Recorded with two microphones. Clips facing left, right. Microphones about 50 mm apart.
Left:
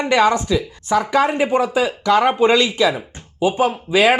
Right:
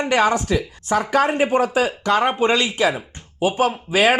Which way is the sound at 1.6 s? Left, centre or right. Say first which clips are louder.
Left 1 dB; right.